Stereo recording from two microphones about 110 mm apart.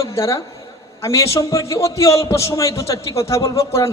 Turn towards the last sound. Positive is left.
turn(degrees=25)  # may be behind; listen again after turning